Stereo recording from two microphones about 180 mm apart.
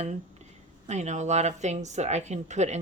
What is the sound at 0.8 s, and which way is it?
Speech, 40° right (ahead or behind).